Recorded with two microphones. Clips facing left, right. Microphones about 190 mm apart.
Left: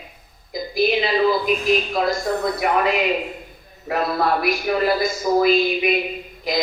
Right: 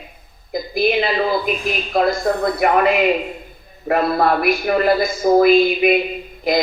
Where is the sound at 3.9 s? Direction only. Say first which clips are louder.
Right 4 dB; 55° right (ahead or behind).